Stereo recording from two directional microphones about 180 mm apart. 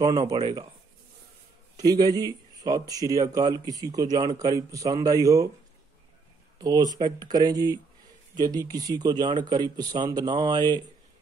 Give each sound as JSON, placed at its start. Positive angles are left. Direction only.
{"t": 0.0, "sound": "speech", "side_deg": -20}
{"t": 1.8, "sound": "speech", "side_deg": -20}
{"t": 6.6, "sound": "speech", "side_deg": -20}